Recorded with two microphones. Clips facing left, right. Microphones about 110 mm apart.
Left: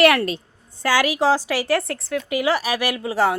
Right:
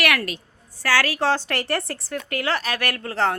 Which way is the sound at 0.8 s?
15° left (ahead or behind).